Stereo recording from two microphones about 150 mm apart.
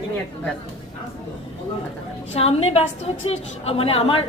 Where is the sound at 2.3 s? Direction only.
45° left (ahead or behind).